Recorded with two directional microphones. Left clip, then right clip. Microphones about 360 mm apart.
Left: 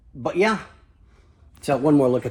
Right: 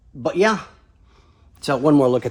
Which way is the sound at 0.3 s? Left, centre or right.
Centre.